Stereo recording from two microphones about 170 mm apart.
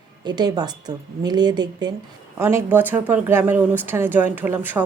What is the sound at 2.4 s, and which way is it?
Speech, 15° right (ahead or behind).